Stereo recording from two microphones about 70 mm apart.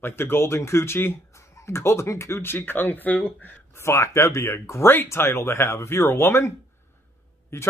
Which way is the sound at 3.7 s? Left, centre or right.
Left.